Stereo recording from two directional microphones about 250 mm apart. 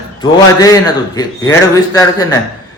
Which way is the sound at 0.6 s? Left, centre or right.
Centre.